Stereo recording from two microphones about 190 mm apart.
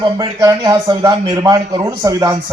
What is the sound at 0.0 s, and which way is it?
A man's voice, 20° right (ahead or behind).